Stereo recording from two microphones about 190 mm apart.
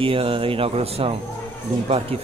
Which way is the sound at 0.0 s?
30° right (ahead or behind).